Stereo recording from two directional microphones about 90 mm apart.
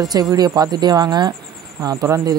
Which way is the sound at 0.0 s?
45° right (ahead or behind).